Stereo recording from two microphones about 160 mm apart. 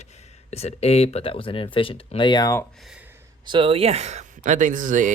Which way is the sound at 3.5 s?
35° right (ahead or behind).